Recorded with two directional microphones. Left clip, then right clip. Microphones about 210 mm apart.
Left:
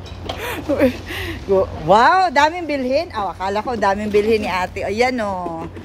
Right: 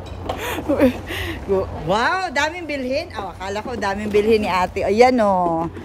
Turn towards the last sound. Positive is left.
turn(degrees=-30)  # may be behind; listen again after turning